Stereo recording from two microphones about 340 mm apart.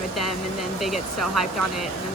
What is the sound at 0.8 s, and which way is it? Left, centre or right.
Speech, centre.